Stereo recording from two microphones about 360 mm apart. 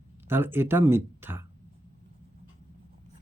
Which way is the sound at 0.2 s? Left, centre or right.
Centre.